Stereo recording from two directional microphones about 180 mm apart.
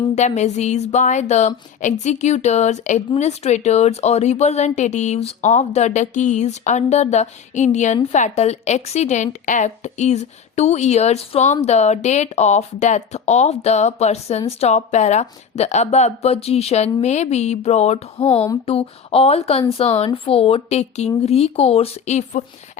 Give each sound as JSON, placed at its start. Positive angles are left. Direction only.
{"t": 0.2, "sound": "a woman's voice", "side_deg": 40}